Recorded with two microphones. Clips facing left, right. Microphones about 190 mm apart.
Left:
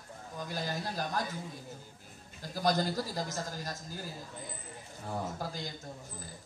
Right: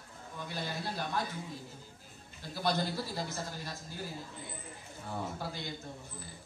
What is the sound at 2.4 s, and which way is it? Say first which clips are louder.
Speech: left 3 dB; 40° left (ahead or behind).